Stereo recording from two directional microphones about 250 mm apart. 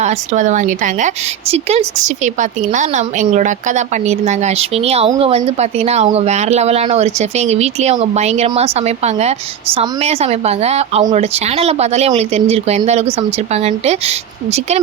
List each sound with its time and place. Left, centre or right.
0.0 s speech: right